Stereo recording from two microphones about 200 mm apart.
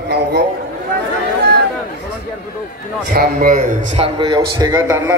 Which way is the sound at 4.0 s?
25° right (ahead or behind).